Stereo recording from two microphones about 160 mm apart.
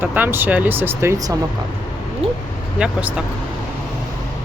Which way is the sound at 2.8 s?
5° right (ahead or behind).